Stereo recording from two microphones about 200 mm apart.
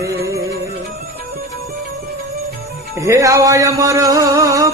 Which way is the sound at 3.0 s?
15° right (ahead or behind).